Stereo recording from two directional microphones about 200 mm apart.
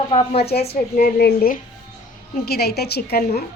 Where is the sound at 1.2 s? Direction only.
50° left (ahead or behind).